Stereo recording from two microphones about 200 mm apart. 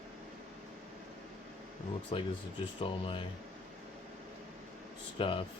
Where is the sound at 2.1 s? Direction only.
25° left (ahead or behind).